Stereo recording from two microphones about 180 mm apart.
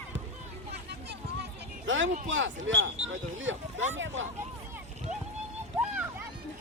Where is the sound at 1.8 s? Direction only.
90° right.